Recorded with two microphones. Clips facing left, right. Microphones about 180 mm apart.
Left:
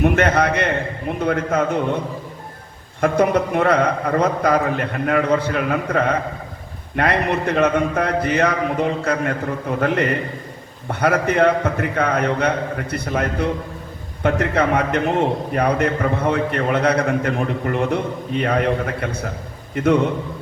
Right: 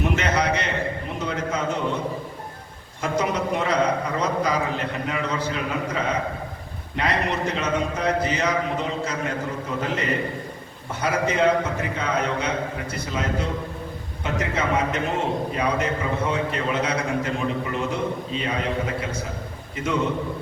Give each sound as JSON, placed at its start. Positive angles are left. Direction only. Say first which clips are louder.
{"t": 0.0, "sound": "a man's voice", "louder": "left 6 dB", "side_deg": 55}
{"t": 3.0, "sound": "a man's voice", "louder": "left 7 dB", "side_deg": 55}
{"t": 19.7, "sound": "a man's voice", "louder": "left 9 dB", "side_deg": 60}